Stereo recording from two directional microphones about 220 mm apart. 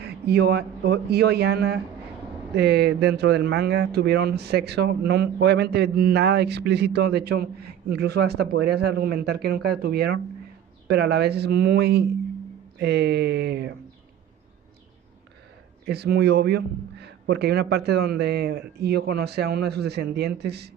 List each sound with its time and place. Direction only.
0.0 s speech: 45° right (ahead or behind)
15.8 s speech: 45° right (ahead or behind)